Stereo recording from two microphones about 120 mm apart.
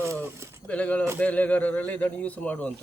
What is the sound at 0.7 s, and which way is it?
Speech, 10° left (ahead or behind).